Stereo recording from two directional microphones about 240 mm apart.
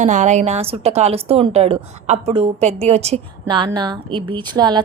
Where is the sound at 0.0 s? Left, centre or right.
Right.